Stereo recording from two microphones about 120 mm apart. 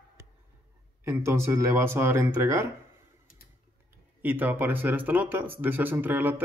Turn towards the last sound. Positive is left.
turn(degrees=-15)  # may be behind; listen again after turning